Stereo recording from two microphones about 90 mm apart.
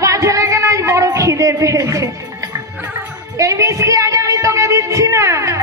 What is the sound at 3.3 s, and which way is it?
Music, 35° right (ahead or behind).